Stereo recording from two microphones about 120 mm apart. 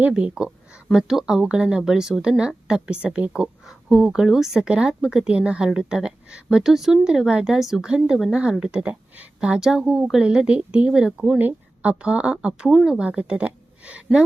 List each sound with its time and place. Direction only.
0.0 s speech: 10° right (ahead or behind)